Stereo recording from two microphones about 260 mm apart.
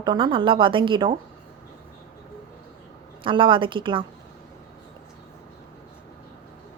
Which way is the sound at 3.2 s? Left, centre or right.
Centre.